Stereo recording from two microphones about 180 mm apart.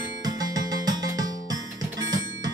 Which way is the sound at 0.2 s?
20° right (ahead or behind).